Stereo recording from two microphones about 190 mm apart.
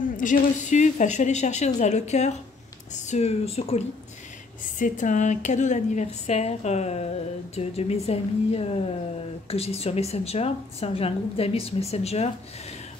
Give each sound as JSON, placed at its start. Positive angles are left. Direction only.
{"t": 0.2, "sound": "a woman's voice", "side_deg": 40}